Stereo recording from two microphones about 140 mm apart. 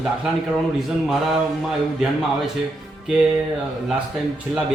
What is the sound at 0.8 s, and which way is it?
A man's voice, centre (ahead or behind).